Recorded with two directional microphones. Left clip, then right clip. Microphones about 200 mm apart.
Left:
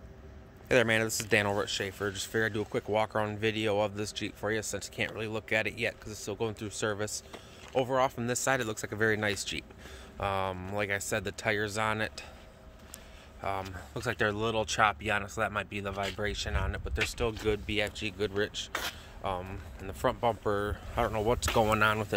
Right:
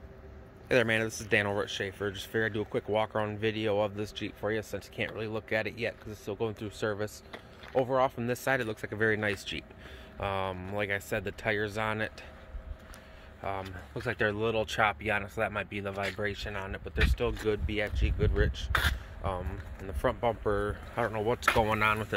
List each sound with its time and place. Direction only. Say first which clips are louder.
0.7 s speech: left 1 dB; 5° left (ahead or behind)
13.4 s speech: left 1 dB; centre (ahead or behind)
21.0 s speech: right 1 dB; 15° left (ahead or behind)